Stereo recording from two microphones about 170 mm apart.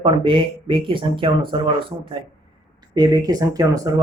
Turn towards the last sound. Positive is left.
turn(degrees=-20)  # may be behind; listen again after turning